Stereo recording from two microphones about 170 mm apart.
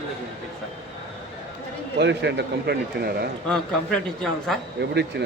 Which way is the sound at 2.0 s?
90° right.